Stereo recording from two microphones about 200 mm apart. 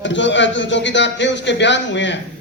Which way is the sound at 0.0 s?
65° left (ahead or behind).